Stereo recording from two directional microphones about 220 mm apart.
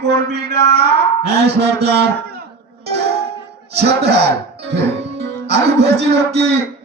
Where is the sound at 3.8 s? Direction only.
50° right (ahead or behind).